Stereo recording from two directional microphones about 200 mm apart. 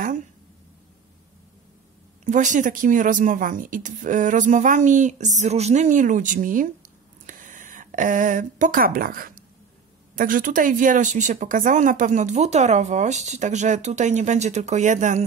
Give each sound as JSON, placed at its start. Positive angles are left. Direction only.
{"t": 2.2, "sound": "speech", "side_deg": -40}